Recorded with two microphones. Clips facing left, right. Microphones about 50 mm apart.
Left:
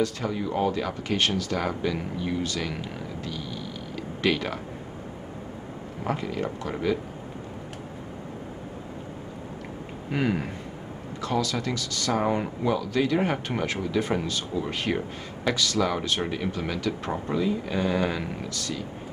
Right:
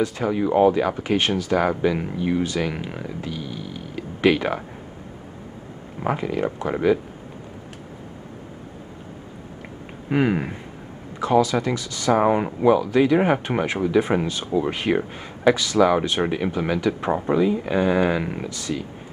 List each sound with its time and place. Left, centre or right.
0.0 s speech: centre
6.0 s speech: centre
10.0 s speech: right